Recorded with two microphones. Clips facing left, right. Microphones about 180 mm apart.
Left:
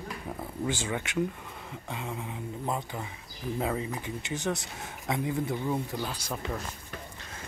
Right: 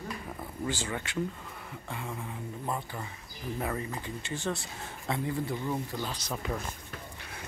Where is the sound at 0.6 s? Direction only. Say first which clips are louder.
Left 2 dB; 15° left (ahead or behind).